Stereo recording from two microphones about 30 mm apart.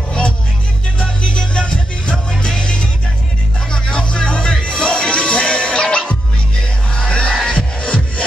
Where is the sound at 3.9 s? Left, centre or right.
Left.